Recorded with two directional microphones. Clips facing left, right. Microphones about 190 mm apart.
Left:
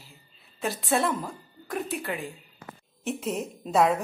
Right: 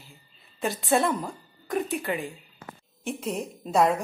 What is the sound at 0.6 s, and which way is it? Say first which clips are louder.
A woman's voice: right 2 dB; centre (ahead or behind).